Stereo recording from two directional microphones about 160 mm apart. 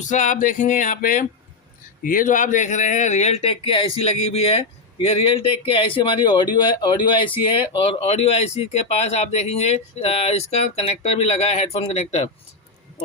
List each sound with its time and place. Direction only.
0.0 s speech: 50° left (ahead or behind)